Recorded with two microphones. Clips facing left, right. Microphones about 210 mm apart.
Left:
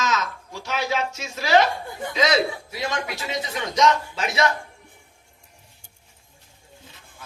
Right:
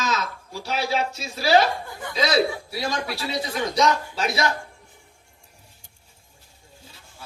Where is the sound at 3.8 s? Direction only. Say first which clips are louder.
Left 2 dB; 35° right (ahead or behind).